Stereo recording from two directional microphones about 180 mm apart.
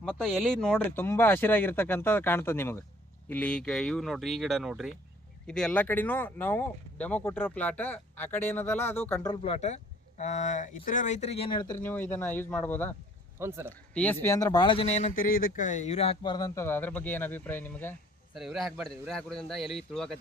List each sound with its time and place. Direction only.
0.0 s a man's voice: centre (ahead or behind)
9.3 s speech: 35° left (ahead or behind)
11.8 s speech: 10° left (ahead or behind)
13.4 s a man's voice: 15° right (ahead or behind)
13.9 s speech: 10° left (ahead or behind)
18.3 s a man's voice: centre (ahead or behind)